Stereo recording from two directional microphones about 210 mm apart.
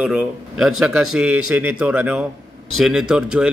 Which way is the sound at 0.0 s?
5° right (ahead or behind).